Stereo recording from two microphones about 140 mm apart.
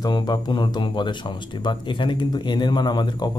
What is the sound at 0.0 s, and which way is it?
A man's voice, 30° left (ahead or behind).